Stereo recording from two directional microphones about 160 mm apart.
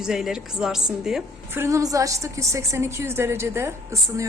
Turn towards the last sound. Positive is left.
turn(degrees=-20)  # may be behind; listen again after turning